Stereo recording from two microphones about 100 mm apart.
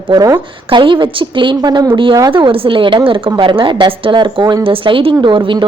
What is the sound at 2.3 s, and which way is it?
A woman's voice, 60° right (ahead or behind).